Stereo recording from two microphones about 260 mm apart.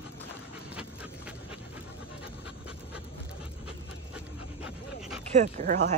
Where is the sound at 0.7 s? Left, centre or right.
Centre.